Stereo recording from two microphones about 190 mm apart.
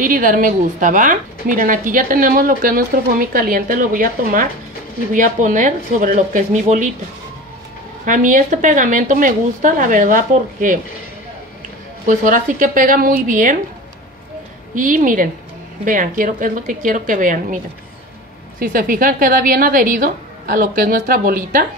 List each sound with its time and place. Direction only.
0.0 s a woman's voice: 45° right (ahead or behind)
8.0 s a woman's voice: 45° right (ahead or behind)
12.1 s a woman's voice: 45° right (ahead or behind)
14.8 s a woman's voice: 45° right (ahead or behind)
18.6 s a woman's voice: 45° right (ahead or behind)